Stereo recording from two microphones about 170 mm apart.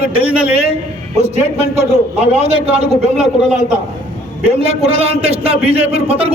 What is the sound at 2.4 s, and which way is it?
Speech, 40° right (ahead or behind).